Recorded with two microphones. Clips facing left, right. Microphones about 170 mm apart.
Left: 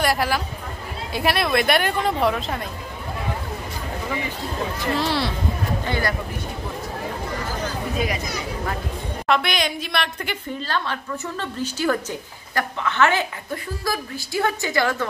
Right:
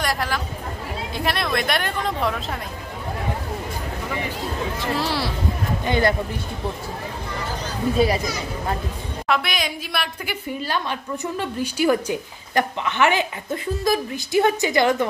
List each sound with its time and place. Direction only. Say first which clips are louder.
0.0 s speech: left 3 dB; 5° left (ahead or behind)
4.9 s speech: left 2 dB; 5° right (ahead or behind)
5.9 s speech: right 7 dB; 25° right (ahead or behind)
8.0 s speech: right 7 dB; 30° right (ahead or behind)
9.3 s a woman's voice: left 2 dB; 5° right (ahead or behind)